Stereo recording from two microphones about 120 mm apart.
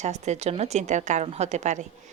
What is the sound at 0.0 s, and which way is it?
Speech, 70° right (ahead or behind).